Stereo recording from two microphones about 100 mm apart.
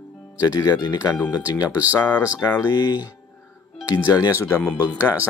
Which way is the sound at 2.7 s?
45° left (ahead or behind).